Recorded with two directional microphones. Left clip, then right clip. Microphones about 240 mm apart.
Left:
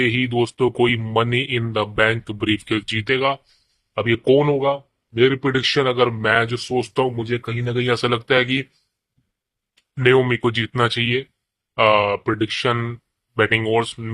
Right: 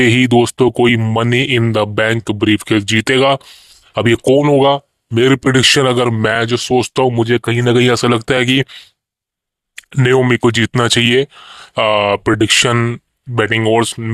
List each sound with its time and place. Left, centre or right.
0.0 s speech: right
10.0 s speech: right